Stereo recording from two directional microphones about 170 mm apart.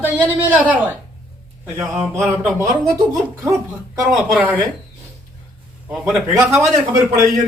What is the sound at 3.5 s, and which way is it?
Speech, 15° right (ahead or behind).